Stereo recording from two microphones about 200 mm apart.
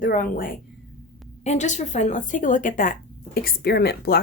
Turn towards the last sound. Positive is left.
turn(degrees=50)  # may be behind; listen again after turning